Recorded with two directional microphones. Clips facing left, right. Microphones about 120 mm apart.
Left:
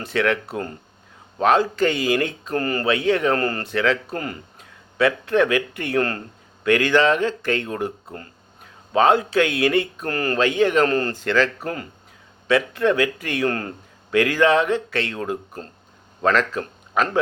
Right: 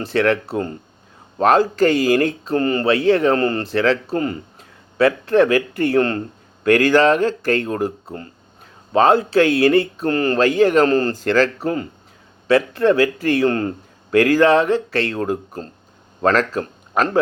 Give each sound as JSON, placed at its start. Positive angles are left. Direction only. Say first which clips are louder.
{"t": 0.0, "sound": "speech", "louder": "right 4 dB", "side_deg": -35}
{"t": 1.4, "sound": "speech", "louder": "right 3 dB", "side_deg": -40}
{"t": 2.5, "sound": "a man's voice", "louder": "right 3 dB", "side_deg": -25}
{"t": 4.9, "sound": "speech", "louder": "right 4 dB", "side_deg": -35}
{"t": 6.7, "sound": "speech", "louder": "right 4 dB", "side_deg": -40}
{"t": 10.3, "sound": "speech", "louder": "right 3 dB", "side_deg": -40}
{"t": 11.6, "sound": "a man's voice", "louder": "right 7 dB", "side_deg": -25}
{"t": 14.1, "sound": "speech", "louder": "right 4 dB", "side_deg": -40}